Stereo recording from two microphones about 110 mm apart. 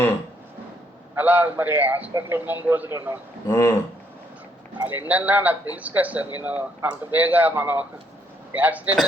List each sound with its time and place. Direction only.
1.1 s a man's voice: 15° right (ahead or behind)
3.4 s speech: 25° left (ahead or behind)
4.8 s a man's voice: 15° right (ahead or behind)